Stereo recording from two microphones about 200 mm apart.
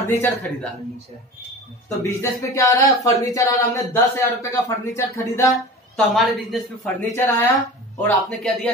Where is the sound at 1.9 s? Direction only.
15° left (ahead or behind).